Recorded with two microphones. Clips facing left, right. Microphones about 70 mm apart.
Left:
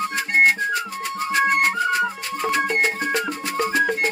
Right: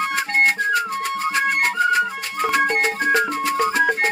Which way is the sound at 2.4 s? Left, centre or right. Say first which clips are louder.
Right 2 dB; right.